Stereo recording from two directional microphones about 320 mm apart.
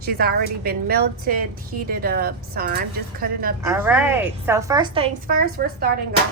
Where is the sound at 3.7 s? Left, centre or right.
Centre.